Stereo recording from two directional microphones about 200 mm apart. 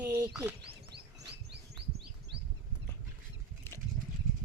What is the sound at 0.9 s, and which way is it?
Chirp, 55° right (ahead or behind).